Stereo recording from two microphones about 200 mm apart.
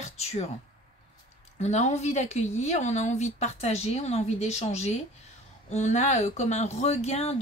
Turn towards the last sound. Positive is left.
turn(degrees=30)  # may be behind; listen again after turning